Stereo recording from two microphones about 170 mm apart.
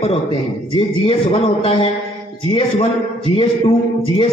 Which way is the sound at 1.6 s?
30° left (ahead or behind).